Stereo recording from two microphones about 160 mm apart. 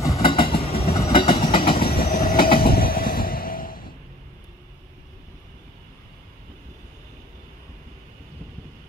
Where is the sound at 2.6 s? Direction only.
70° left (ahead or behind).